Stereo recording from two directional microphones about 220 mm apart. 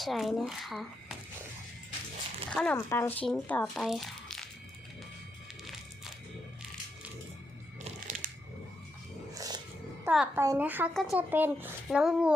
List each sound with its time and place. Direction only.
0.0 s speech: centre (ahead or behind)
2.5 s speech: 5° left (ahead or behind)
3.8 s crumpling: centre (ahead or behind)
7.9 s crunch: 35° right (ahead or behind)
9.3 s a sound: 15° right (ahead or behind)
10.0 s a woman's voice: 5° right (ahead or behind)